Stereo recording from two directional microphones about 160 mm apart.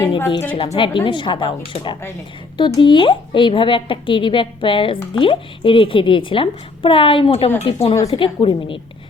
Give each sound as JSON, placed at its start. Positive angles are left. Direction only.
{"t": 0.5, "sound": "a woman's voice", "side_deg": 40}